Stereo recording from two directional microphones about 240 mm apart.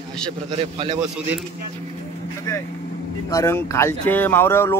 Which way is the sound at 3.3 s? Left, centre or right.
Centre.